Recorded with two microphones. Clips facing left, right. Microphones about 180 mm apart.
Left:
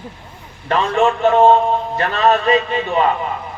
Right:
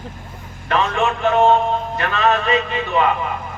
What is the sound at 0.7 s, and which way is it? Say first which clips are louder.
A man's voice: left 3 dB; 35° left (ahead or behind).